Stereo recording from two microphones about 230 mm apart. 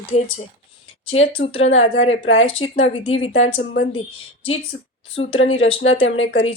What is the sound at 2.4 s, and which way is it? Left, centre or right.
Speech, left.